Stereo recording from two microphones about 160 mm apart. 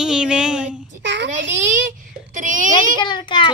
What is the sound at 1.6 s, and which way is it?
A child's voice, 55° right (ahead or behind).